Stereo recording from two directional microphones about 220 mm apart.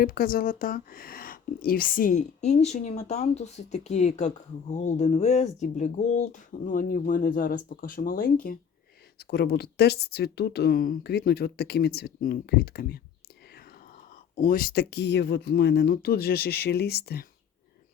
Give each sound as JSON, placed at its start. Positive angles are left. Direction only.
{"t": 0.0, "sound": "speech", "side_deg": 40}
{"t": 14.3, "sound": "speech", "side_deg": 35}